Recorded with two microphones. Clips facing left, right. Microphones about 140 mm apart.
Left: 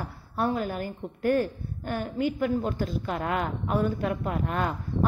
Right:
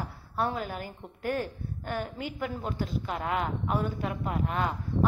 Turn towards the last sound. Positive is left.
turn(degrees=50)  # may be behind; listen again after turning